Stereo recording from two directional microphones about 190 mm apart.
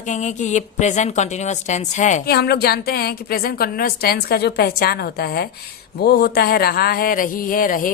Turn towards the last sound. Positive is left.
turn(degrees=45)  # may be behind; listen again after turning